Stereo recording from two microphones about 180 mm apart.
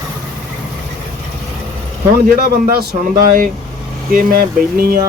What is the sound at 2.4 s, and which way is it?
Speech, 55° right (ahead or behind).